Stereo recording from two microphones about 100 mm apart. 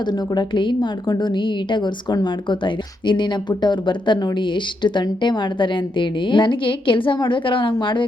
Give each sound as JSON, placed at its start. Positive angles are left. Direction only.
{"t": 0.1, "sound": "speech", "side_deg": 50}